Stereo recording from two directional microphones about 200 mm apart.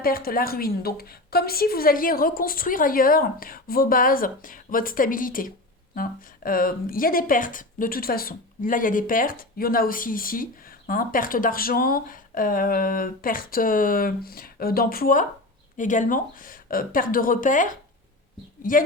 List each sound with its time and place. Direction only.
0.0 s a woman's voice: 45° left (ahead or behind)